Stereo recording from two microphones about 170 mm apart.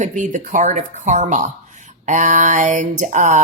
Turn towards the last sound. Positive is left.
turn(degrees=-50)  # may be behind; listen again after turning